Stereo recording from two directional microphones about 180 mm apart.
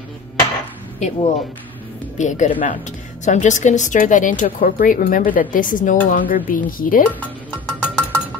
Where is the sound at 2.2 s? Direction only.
45° left (ahead or behind).